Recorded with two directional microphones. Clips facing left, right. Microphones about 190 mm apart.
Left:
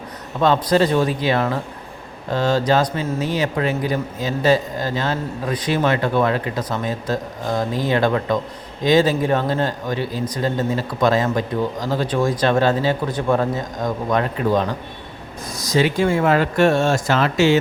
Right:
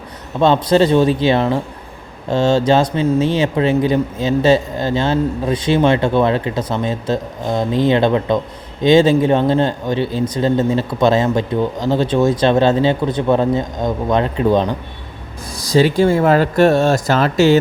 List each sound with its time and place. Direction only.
0.3 s speech: 25° right (ahead or behind)